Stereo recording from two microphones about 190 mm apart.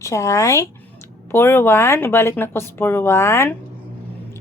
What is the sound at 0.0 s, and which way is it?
Speech, 15° left (ahead or behind).